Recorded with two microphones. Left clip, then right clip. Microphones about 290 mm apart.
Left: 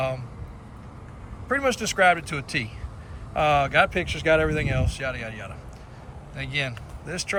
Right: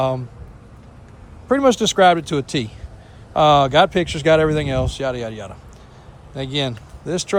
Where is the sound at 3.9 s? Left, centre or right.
Right.